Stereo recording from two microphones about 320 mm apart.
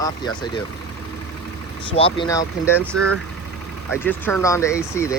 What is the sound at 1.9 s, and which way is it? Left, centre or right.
Speech, centre.